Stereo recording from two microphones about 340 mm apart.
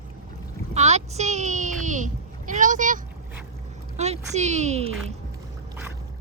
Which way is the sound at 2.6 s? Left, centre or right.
Right.